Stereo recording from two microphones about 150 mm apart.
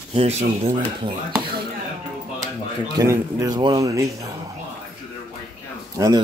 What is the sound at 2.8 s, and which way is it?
Speech, 20° right (ahead or behind).